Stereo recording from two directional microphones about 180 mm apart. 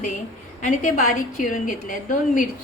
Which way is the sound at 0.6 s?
45° left (ahead or behind).